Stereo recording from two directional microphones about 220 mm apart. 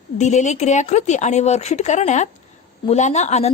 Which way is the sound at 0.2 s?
30° left (ahead or behind).